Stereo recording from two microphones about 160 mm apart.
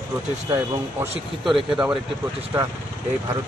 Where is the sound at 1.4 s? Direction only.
Centre (ahead or behind).